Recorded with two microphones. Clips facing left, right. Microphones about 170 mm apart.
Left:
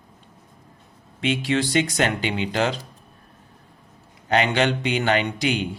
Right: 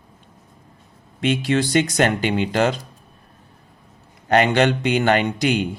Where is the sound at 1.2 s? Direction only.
45° right (ahead or behind).